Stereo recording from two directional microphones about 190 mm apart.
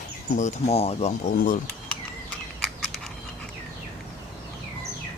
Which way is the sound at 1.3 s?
45° left (ahead or behind).